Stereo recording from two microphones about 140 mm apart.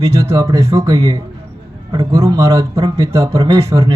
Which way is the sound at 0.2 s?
25° right (ahead or behind).